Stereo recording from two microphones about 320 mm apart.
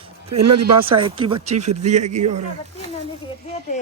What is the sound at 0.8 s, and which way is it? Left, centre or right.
A woman's voice, centre.